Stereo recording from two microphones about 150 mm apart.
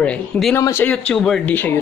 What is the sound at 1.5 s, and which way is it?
Speech, 15° left (ahead or behind).